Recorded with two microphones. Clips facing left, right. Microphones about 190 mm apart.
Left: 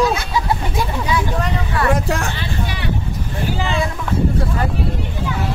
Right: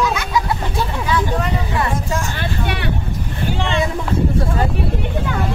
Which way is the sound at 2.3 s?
60° right (ahead or behind).